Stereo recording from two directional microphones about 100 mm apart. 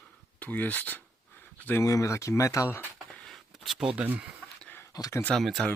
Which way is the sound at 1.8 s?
35° left (ahead or behind).